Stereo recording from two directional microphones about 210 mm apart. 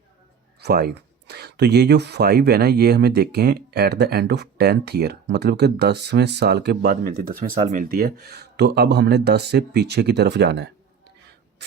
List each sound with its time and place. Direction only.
0.6 s speech: 45° right (ahead or behind)